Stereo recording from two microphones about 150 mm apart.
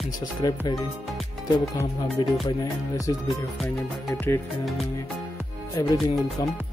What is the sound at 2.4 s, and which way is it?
Music, 25° left (ahead or behind).